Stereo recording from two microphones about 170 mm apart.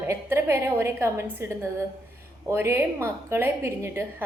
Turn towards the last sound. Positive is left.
turn(degrees=-15)  # may be behind; listen again after turning